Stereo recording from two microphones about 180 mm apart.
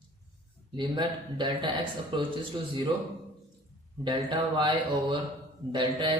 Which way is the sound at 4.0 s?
25° right (ahead or behind).